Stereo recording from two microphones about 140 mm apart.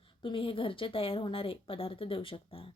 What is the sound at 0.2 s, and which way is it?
A woman's voice, 40° left (ahead or behind).